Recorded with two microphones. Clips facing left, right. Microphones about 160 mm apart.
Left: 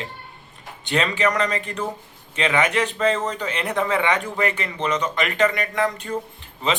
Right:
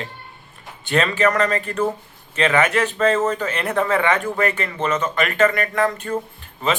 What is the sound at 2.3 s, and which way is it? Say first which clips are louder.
Speech: right 3 dB; 15° left (ahead or behind).